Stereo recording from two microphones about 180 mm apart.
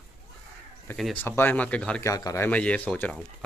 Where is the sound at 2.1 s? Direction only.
20° left (ahead or behind).